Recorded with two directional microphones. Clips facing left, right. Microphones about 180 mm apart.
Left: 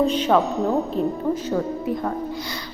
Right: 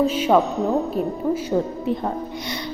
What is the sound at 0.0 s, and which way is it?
Speech, 5° right (ahead or behind).